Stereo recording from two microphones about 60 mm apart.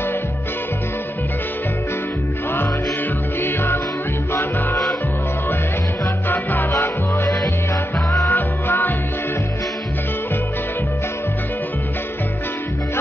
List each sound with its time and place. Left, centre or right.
3.3 s music: left
6.2 s music: left
6.7 s music: left